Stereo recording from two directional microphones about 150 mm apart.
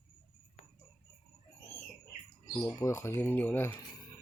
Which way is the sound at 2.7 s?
20° left (ahead or behind).